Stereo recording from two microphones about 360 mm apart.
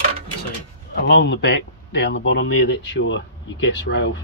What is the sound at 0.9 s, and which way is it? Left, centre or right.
Speech, left.